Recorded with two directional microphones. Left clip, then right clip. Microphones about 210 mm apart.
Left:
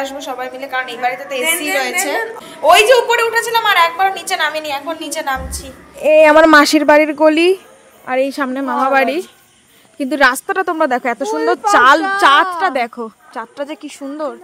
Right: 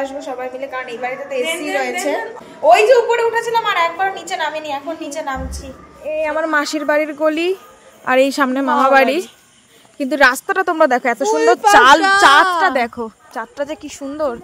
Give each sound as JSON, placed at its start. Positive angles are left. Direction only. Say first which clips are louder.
{"t": 0.0, "sound": "a woman's voice", "louder": "left 1 dB", "side_deg": -10}
{"t": 6.0, "sound": "speech", "louder": "left 12 dB", "side_deg": 55}
{"t": 6.5, "sound": "speech", "louder": "left 8 dB", "side_deg": 35}
{"t": 8.0, "sound": "a woman's voice", "louder": "right 3 dB", "side_deg": -15}
{"t": 9.9, "sound": "speech", "louder": "even", "side_deg": 5}